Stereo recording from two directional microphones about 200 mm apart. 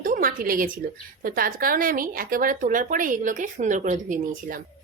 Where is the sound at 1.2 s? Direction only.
45° right (ahead or behind).